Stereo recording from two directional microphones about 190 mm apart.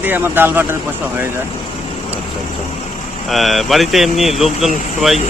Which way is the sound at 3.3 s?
Centre (ahead or behind).